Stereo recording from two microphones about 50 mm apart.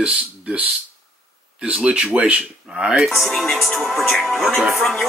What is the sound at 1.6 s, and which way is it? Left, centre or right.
Speech, right.